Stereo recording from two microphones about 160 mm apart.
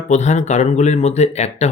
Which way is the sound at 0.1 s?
45° left (ahead or behind).